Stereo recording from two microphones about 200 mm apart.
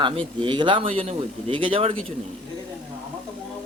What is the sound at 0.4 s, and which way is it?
Speech, 25° right (ahead or behind).